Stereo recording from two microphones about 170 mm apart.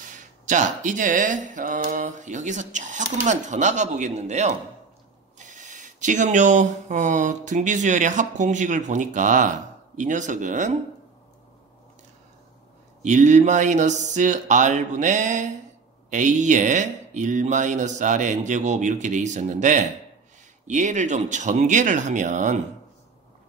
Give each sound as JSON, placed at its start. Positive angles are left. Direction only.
{"t": 0.0, "sound": "speech", "side_deg": -45}
{"t": 13.0, "sound": "speech", "side_deg": -45}